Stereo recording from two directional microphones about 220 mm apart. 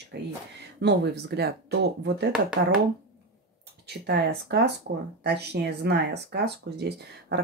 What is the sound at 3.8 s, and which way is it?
Speech, 50° right (ahead or behind).